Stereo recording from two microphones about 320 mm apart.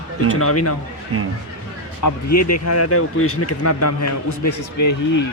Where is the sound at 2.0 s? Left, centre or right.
Left.